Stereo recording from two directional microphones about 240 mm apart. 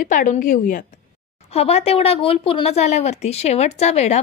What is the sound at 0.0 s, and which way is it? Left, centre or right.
A woman's voice, left.